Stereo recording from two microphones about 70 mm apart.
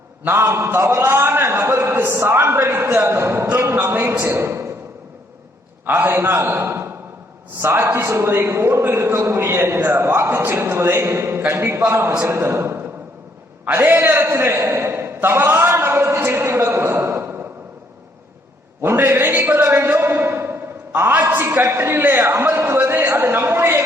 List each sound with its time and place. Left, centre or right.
0.3 s a man's voice: right
2.3 s a man's voice: right
5.8 s a man's voice: right
14.5 s a sound: right
18.8 s a man's voice: right